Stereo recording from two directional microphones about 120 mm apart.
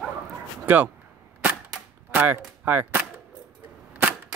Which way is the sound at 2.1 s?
15° right (ahead or behind).